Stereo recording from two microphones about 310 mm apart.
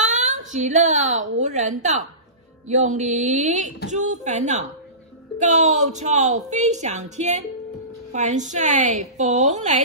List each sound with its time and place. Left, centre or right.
0.0 s a woman's voice: right